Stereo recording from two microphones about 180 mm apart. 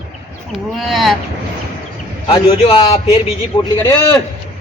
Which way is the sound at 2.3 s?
30° left (ahead or behind).